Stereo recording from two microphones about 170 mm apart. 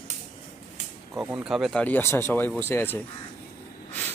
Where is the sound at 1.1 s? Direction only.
10° right (ahead or behind); by 3.0 s 15° left (ahead or behind).